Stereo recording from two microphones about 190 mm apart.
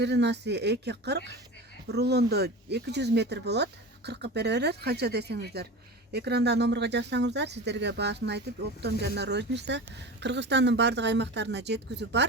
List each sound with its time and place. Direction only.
0.0 s speech: 65° right (ahead or behind)